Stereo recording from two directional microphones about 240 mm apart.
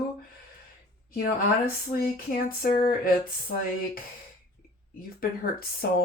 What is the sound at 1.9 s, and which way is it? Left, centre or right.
Speech, left.